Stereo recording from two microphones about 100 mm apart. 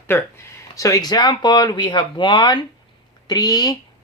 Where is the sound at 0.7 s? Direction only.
35° left (ahead or behind).